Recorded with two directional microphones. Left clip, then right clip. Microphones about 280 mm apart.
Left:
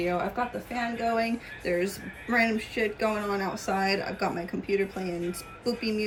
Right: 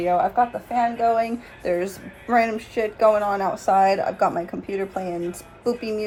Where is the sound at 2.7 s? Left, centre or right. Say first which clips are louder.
Right 10 dB; centre.